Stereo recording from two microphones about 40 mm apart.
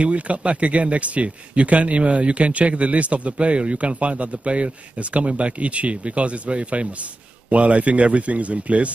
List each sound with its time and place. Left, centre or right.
0.0 s speech: right